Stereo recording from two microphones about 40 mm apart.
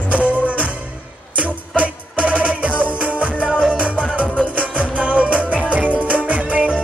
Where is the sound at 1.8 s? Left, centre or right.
Right.